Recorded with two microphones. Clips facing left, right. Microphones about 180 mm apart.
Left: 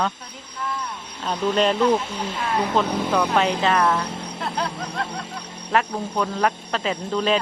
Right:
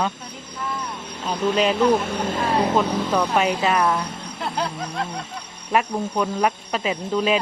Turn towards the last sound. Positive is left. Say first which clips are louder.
# right 1 dB
turn(degrees=-10)  # may be behind; listen again after turning